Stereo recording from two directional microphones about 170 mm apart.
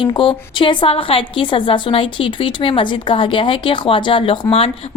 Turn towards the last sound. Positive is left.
turn(degrees=35)  # may be behind; listen again after turning